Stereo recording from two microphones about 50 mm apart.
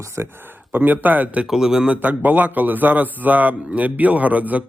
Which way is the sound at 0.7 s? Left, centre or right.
Right.